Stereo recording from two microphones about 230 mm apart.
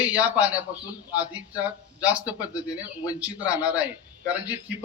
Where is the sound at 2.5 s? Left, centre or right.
Centre.